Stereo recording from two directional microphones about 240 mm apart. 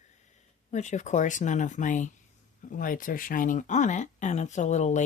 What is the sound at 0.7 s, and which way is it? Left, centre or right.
Speech, left.